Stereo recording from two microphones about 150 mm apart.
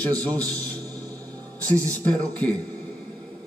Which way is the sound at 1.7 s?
20° right (ahead or behind).